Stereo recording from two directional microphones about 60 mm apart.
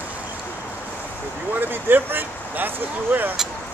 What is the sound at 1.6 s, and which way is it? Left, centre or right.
Speech, right.